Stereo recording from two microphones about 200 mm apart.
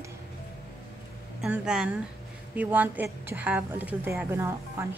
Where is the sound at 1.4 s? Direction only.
5° right (ahead or behind).